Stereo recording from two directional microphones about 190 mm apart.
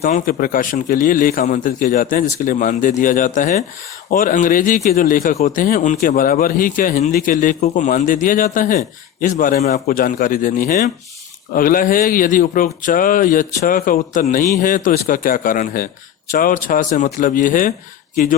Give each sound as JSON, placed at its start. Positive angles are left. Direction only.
{"t": 0.0, "sound": "speech", "side_deg": 45}